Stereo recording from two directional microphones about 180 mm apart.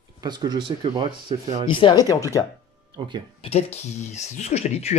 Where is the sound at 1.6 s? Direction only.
25° left (ahead or behind).